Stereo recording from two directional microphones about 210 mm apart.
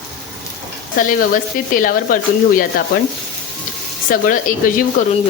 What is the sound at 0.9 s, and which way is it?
Speech, 40° left (ahead or behind).